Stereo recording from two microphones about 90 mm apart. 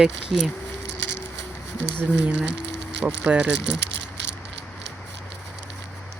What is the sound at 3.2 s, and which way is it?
Speech, 15° right (ahead or behind).